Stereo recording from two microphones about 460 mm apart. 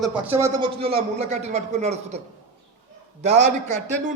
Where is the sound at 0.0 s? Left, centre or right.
Centre.